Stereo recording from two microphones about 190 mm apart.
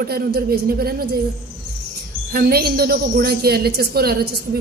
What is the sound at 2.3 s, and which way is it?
A woman's voice, 55° right (ahead or behind).